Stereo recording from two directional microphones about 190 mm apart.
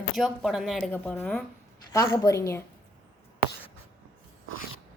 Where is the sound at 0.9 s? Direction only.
10° left (ahead or behind).